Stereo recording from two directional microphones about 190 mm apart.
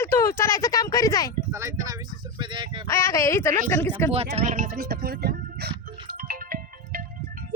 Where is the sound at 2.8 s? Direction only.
15° left (ahead or behind).